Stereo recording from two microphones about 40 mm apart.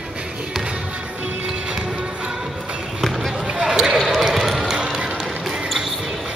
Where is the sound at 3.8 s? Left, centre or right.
Centre.